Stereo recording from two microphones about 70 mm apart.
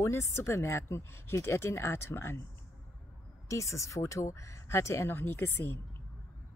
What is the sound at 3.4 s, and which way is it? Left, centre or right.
Speech, left.